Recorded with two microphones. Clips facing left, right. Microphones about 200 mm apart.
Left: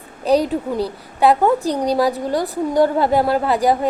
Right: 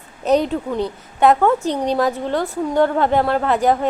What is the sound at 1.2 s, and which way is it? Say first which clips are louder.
Speech: even; 10° left (ahead or behind).